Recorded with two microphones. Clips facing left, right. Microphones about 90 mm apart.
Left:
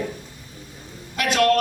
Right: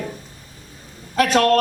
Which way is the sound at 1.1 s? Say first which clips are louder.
Right 4 dB; 40° right (ahead or behind).